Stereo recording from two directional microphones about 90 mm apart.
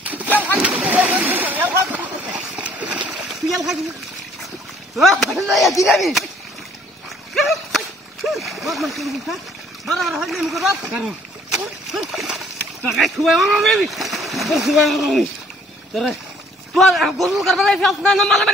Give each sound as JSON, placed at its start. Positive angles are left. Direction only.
{"t": 0.0, "sound": "splash", "side_deg": -20}
{"t": 3.4, "sound": "a sound", "side_deg": 0}
{"t": 4.9, "sound": "a man's voice", "side_deg": 0}
{"t": 7.3, "sound": "splash", "side_deg": 0}
{"t": 9.8, "sound": "a man's voice", "side_deg": 0}